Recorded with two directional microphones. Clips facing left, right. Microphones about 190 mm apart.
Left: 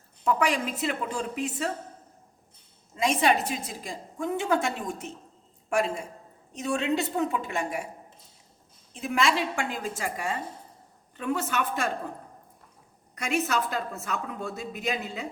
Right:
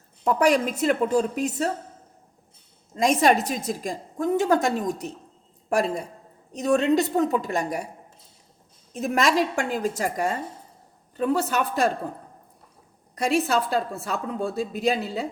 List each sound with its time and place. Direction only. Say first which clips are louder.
0.3 s a woman's voice: right 5 dB; 40° right (ahead or behind)
2.9 s a woman's voice: right 4 dB; 40° right (ahead or behind)
8.9 s a woman's voice: right 4 dB; 45° right (ahead or behind)
13.1 s a woman's voice: right 5 dB; 35° right (ahead or behind)